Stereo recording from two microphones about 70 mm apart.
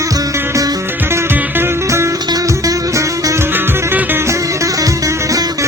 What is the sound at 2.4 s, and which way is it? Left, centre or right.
Music, right.